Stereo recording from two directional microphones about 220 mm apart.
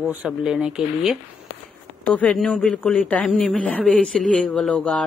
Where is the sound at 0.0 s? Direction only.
5° right (ahead or behind).